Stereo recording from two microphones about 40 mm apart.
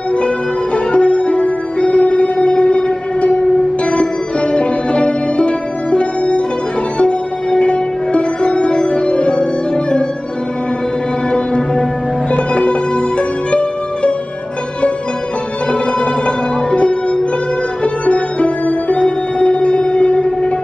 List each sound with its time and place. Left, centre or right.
0.9 s music: left
11.3 s music: left
15.7 s music: left